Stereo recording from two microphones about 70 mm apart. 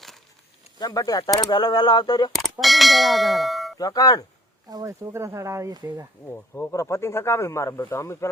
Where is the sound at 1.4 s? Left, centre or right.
Left.